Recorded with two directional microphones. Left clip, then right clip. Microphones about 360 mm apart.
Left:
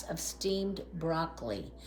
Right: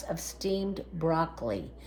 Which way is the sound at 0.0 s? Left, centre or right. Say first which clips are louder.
Right 2 dB; centre.